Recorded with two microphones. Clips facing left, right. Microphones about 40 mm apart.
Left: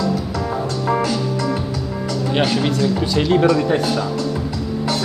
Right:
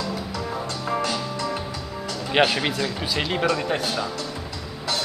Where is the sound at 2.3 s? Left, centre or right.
Centre.